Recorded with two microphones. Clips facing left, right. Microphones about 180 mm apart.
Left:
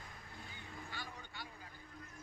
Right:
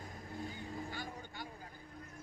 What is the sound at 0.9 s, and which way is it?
Vehicle, 45° right (ahead or behind).